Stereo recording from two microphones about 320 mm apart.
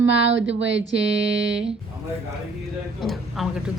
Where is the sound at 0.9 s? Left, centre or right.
Right.